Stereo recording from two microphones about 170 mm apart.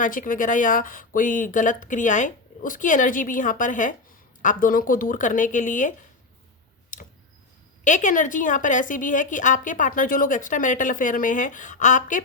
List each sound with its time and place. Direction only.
0.0 s a woman's voice: 55° left (ahead or behind)
7.9 s a woman's voice: 45° left (ahead or behind)